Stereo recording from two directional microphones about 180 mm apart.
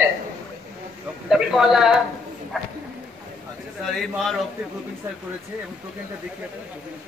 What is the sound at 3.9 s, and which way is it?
Speech, centre (ahead or behind).